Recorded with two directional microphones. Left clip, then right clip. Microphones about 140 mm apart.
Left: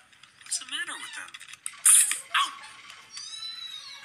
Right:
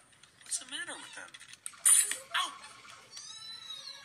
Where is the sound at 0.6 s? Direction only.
35° right (ahead or behind).